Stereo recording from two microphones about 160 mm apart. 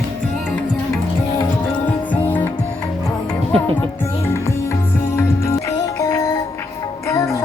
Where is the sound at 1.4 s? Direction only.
10° left (ahead or behind).